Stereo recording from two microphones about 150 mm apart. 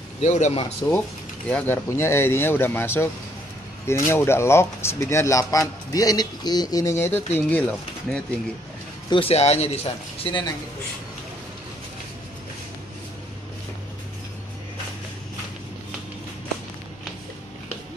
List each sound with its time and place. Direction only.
0.2 s a man's voice: 50° left (ahead or behind)
0.8 s speech: 25° left (ahead or behind)
1.5 s speech: 10° left (ahead or behind)
9.1 s a man's voice: 40° left (ahead or behind)